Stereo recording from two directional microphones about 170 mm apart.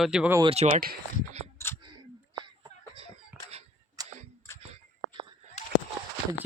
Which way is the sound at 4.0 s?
20° right (ahead or behind).